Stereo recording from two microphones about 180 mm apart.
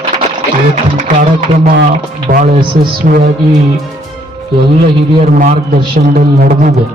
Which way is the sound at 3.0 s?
50° right (ahead or behind).